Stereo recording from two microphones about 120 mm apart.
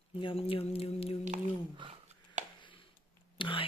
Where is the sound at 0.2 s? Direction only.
45° left (ahead or behind).